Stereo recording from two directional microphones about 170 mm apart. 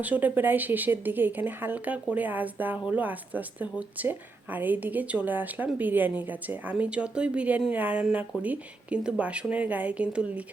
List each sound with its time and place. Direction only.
0.0 s a woman's voice: 10° right (ahead or behind)